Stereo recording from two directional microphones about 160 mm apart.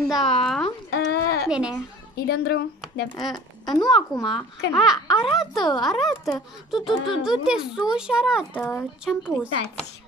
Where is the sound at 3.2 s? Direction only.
Centre (ahead or behind).